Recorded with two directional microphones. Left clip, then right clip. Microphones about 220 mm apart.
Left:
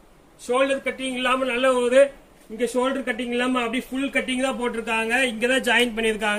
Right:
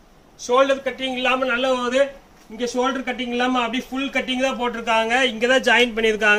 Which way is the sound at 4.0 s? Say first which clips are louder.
Right 2 dB; 20° right (ahead or behind).